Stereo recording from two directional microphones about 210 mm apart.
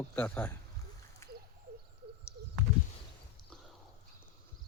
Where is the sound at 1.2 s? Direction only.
15° left (ahead or behind).